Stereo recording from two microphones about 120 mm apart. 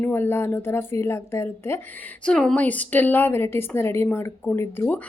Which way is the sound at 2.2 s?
5° left (ahead or behind).